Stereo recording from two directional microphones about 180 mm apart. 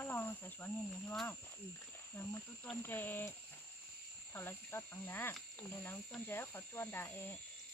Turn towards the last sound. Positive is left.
turn(degrees=10)  # may be behind; listen again after turning